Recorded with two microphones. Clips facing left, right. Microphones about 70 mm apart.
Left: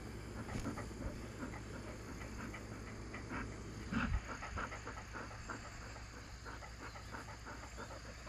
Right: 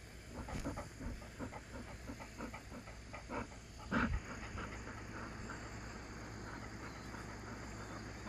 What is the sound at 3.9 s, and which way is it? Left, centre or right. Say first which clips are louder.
Dog: right 4 dB; right.